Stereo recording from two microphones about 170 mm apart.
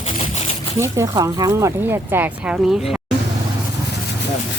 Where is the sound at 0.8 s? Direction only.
20° right (ahead or behind).